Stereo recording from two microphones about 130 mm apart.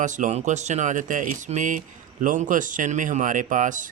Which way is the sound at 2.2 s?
90° right.